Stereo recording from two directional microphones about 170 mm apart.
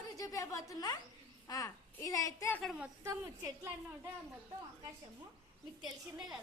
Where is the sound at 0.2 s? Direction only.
20° left (ahead or behind).